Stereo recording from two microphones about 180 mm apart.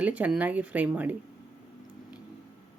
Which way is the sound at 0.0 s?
10° right (ahead or behind).